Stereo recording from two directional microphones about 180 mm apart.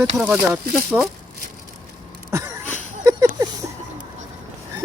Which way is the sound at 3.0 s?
15° right (ahead or behind).